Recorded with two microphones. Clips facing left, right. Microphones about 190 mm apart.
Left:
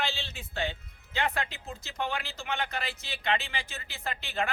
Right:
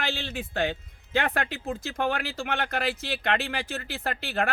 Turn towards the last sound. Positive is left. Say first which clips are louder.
# right 4 dB
turn(degrees=-55)  # may be behind; listen again after turning